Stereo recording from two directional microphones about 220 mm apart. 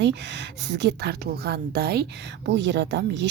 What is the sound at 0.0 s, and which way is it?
A woman's voice, 55° right (ahead or behind).